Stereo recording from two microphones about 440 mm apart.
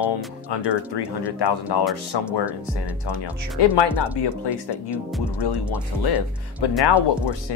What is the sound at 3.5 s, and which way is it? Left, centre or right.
Speech, left.